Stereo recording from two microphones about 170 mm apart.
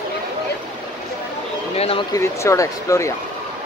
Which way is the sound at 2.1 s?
15° left (ahead or behind).